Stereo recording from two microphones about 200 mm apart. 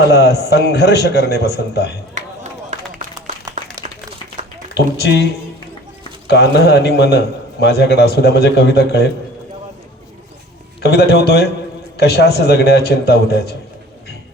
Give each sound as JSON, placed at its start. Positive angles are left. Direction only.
{"t": 0.1, "sound": "a man's voice", "side_deg": 55}
{"t": 2.1, "sound": "a sound", "side_deg": -35}
{"t": 4.7, "sound": "a man's voice", "side_deg": 55}
{"t": 10.8, "sound": "a man's voice", "side_deg": 55}